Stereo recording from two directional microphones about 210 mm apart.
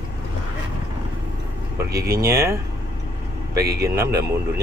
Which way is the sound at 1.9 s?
50° right (ahead or behind).